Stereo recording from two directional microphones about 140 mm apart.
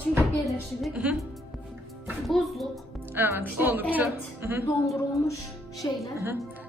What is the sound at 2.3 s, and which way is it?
Speech, centre (ahead or behind).